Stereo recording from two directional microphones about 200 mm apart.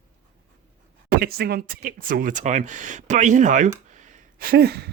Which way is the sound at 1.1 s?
50° right (ahead or behind).